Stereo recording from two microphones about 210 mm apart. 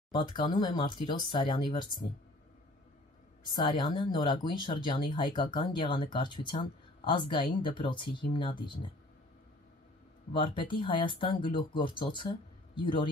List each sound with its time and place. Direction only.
0.1 s speech: 20° left (ahead or behind)
3.5 s speech: 20° left (ahead or behind)
10.3 s speech: 25° left (ahead or behind)